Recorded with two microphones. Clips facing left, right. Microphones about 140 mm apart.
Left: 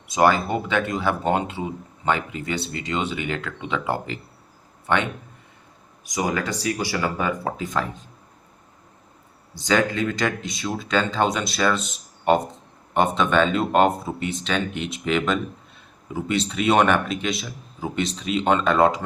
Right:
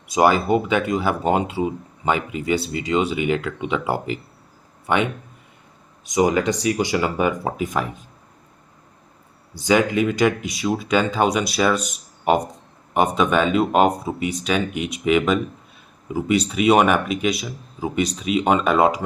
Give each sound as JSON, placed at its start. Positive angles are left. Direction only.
{"t": 0.2, "sound": "speech", "side_deg": -10}
{"t": 6.0, "sound": "speech", "side_deg": -20}
{"t": 9.6, "sound": "speech", "side_deg": -15}
{"t": 12.9, "sound": "speech", "side_deg": -5}